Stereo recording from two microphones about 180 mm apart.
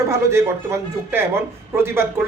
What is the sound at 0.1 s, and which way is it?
A woman's voice, 15° right (ahead or behind).